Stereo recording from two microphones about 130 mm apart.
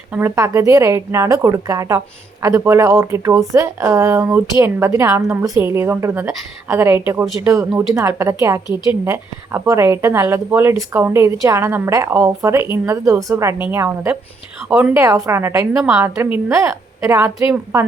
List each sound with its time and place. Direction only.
0.1 s a woman's voice: 20° right (ahead or behind)
15.7 s a woman's voice: 5° right (ahead or behind)
16.0 s speech: 20° right (ahead or behind)